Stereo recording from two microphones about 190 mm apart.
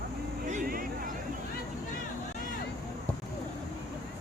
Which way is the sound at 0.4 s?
45° right (ahead or behind).